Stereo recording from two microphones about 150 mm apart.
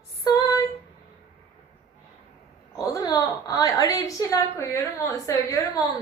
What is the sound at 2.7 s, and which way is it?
A woman's voice, 25° left (ahead or behind).